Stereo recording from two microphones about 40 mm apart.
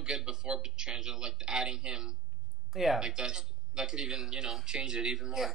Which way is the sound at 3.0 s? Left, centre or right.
Centre.